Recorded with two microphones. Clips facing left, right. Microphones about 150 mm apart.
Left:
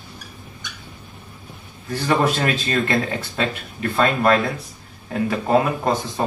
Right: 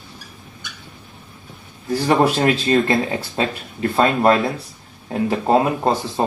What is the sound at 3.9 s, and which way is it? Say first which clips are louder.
Speech: right 2 dB; 25° right (ahead or behind).